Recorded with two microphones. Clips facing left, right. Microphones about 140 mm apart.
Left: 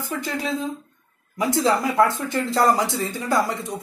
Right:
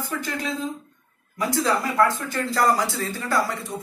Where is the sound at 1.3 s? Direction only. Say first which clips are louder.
Left 3 dB; 20° left (ahead or behind).